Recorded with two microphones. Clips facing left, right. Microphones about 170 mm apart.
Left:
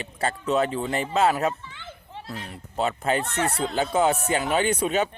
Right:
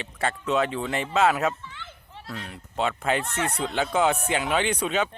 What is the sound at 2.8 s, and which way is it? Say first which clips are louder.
Speech: left 1 dB; 35° left (ahead or behind).